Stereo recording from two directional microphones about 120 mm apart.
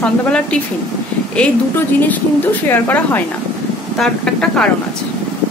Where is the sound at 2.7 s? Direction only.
15° left (ahead or behind).